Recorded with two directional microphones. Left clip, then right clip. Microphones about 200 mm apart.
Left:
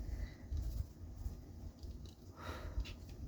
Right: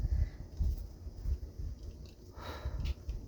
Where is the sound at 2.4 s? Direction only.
25° right (ahead or behind).